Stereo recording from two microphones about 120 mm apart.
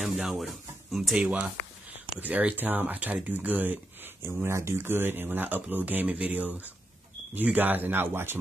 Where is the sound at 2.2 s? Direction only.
10° right (ahead or behind).